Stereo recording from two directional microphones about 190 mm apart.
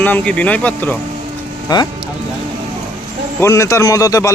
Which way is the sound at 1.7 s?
20° left (ahead or behind).